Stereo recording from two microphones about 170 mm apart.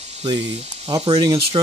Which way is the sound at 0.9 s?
30° right (ahead or behind).